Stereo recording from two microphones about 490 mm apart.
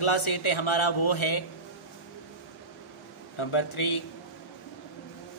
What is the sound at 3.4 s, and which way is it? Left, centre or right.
Speech, left.